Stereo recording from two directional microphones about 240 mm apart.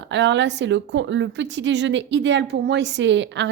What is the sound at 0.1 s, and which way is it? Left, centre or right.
A woman's voice, right.